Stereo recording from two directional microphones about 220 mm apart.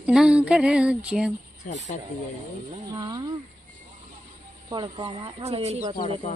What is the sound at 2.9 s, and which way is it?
Speech, 20° right (ahead or behind).